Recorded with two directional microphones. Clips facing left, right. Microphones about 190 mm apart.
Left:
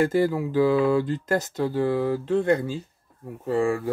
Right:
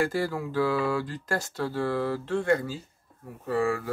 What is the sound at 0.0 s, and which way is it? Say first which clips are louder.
Speech: left 6 dB; 20° left (ahead or behind).